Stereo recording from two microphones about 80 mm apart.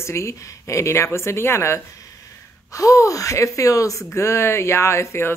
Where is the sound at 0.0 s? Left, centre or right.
Left.